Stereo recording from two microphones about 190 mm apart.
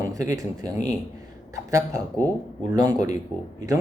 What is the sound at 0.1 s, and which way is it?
Speech, 20° right (ahead or behind).